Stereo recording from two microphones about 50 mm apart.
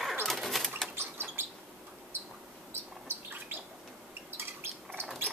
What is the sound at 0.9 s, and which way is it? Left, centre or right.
Bird flight, right.